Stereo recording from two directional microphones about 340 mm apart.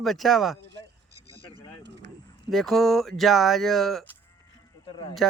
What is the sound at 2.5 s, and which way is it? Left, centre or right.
Speech, centre.